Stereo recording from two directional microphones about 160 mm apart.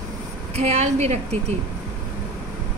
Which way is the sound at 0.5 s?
40° right (ahead or behind).